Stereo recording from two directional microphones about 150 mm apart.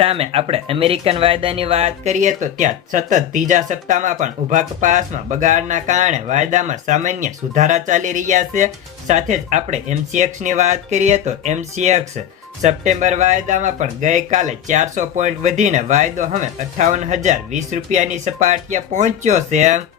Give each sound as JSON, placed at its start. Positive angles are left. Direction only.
{"t": 0.0, "sound": "speech", "side_deg": -40}